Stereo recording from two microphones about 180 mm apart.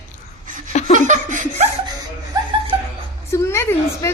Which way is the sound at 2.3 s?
25° right (ahead or behind).